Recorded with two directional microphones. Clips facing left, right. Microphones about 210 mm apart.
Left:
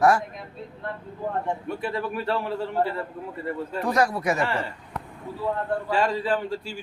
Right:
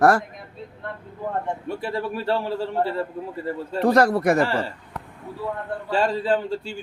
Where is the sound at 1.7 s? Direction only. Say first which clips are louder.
Right 1 dB; 30° right (ahead or behind).